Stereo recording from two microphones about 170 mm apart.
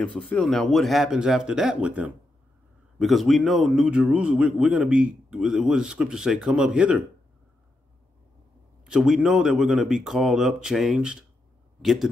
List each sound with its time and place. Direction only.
0.0 s a man's voice: 5° left (ahead or behind)
8.8 s a man's voice: 5° right (ahead or behind)